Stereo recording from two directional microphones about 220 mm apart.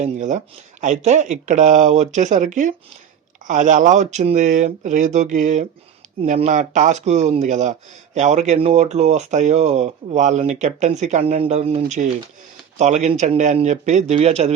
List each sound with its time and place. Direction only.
0.0 s a man's voice: 35° right (ahead or behind)